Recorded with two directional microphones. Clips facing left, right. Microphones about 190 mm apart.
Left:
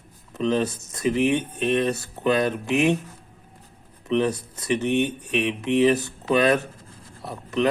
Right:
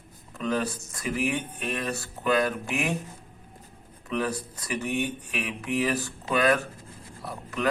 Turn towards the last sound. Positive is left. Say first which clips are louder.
# left 7 dB
turn(degrees=20)  # may be behind; listen again after turning